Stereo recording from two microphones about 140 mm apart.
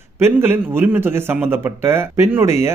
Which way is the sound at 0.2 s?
15° right (ahead or behind).